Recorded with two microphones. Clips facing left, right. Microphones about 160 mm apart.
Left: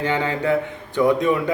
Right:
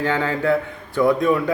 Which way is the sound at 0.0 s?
20° left (ahead or behind).